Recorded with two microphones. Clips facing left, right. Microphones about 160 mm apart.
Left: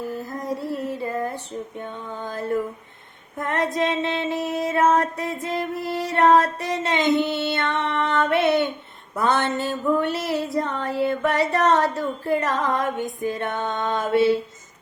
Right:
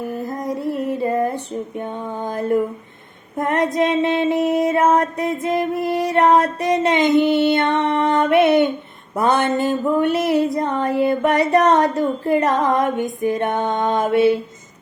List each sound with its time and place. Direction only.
0.4 s music: 15° right (ahead or behind)
1.8 s female singing: 20° right (ahead or behind)
3.4 s music: 15° right (ahead or behind)
7.9 s a sound: 20° right (ahead or behind)
9.1 s female singing: 15° right (ahead or behind)